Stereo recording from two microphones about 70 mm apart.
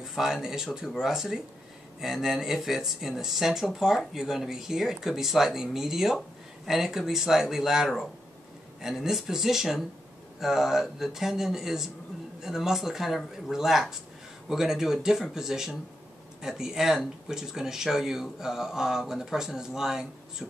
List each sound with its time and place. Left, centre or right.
0.0 s speech: centre